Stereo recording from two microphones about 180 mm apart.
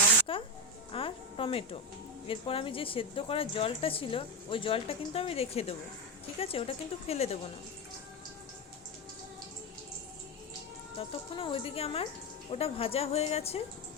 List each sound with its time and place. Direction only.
0.9 s a sound: 30° left (ahead or behind)
2.2 s a woman's voice: 30° left (ahead or behind)
10.9 s a woman's voice: 30° left (ahead or behind)